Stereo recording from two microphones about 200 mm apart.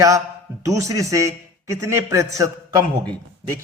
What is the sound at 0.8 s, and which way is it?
Speech, 15° right (ahead or behind).